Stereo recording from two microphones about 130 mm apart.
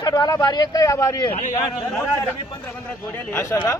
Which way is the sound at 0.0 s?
30° left (ahead or behind).